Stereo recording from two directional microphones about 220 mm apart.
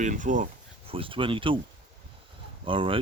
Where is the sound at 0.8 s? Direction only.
25° right (ahead or behind).